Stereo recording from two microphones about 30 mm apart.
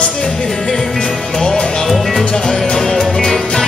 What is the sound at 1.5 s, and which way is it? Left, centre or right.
Music, left.